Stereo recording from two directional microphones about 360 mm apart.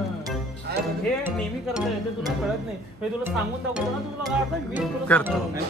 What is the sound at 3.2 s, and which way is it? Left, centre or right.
A man's voice, centre.